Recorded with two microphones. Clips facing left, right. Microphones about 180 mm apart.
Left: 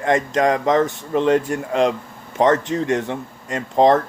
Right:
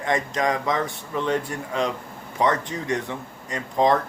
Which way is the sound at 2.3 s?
45° left (ahead or behind).